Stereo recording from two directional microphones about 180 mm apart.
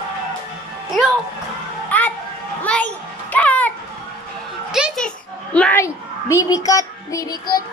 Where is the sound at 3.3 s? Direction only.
10° left (ahead or behind).